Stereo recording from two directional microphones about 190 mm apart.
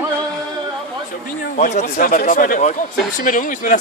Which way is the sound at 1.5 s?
40° left (ahead or behind).